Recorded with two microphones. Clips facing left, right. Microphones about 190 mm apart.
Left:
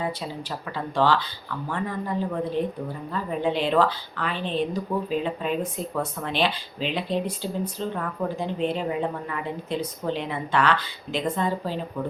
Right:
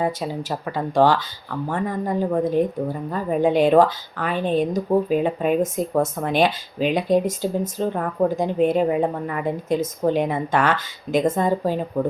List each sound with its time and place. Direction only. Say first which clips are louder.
0.9 s speech: right 5 dB; 45° right (ahead or behind)